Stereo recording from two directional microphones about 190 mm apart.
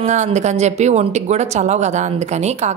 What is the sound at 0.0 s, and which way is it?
Speech, 35° right (ahead or behind).